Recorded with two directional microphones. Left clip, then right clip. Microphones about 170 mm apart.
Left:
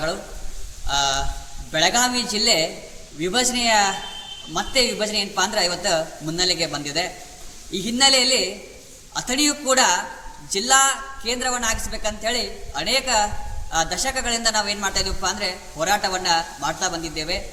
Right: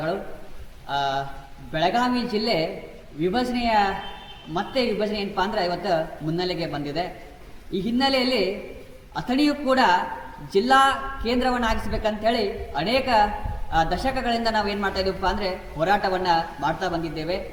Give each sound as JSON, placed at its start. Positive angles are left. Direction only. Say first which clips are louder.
{"t": 0.9, "sound": "a man's voice", "louder": "left 3 dB", "side_deg": 15}